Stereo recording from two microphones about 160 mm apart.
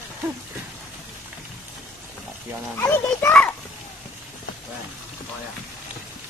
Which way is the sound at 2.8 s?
15° left (ahead or behind).